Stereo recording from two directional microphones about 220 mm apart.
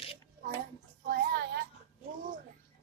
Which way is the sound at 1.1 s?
45° right (ahead or behind).